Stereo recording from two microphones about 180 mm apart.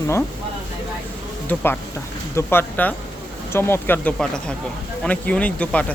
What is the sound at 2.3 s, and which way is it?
Speech, 10° left (ahead or behind).